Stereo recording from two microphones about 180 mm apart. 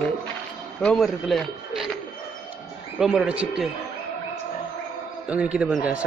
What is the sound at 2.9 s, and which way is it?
Speech, 5° right (ahead or behind).